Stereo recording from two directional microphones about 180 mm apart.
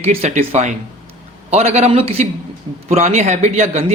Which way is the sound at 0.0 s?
35° right (ahead or behind).